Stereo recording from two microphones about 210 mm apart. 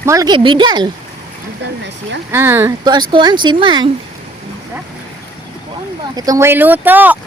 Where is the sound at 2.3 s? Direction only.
10° right (ahead or behind).